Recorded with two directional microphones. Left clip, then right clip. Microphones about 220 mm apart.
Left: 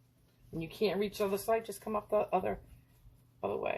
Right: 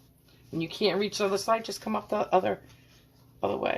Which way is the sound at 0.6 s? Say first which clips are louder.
Right 6 dB; 40° right (ahead or behind).